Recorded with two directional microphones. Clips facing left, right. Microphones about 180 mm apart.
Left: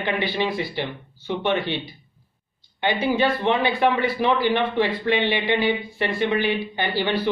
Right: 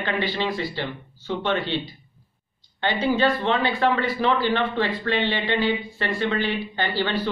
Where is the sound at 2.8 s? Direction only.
15° left (ahead or behind).